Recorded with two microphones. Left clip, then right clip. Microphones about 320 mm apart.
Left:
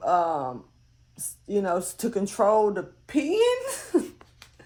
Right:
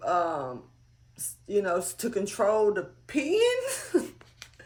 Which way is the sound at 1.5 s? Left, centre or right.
Centre.